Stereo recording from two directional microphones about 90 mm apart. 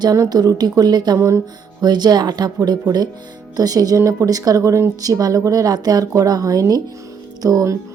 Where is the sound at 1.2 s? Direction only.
30° right (ahead or behind).